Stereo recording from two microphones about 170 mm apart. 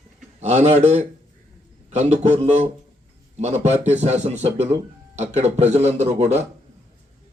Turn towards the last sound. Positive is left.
turn(degrees=-40)  # may be behind; listen again after turning